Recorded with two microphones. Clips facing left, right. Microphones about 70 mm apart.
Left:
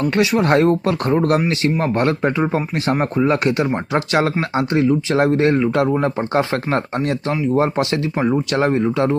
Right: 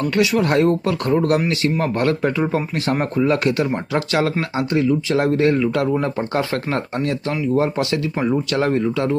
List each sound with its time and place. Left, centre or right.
0.0 s speech: left
8.1 s speech: centre